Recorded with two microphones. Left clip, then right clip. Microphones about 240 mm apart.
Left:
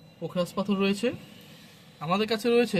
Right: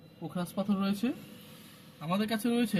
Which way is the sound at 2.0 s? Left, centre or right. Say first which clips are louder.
Left 7 dB; left.